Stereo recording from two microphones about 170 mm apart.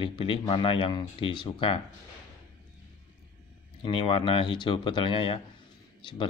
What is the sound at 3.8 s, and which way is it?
Speech, 30° left (ahead or behind).